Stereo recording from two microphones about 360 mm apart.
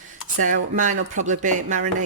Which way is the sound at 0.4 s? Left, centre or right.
Right.